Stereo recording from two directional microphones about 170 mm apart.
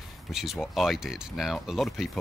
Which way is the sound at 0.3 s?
Centre (ahead or behind).